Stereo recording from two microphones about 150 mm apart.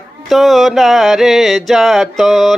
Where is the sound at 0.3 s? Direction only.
Centre (ahead or behind).